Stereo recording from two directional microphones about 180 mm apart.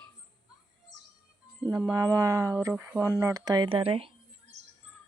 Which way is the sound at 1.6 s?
15° right (ahead or behind).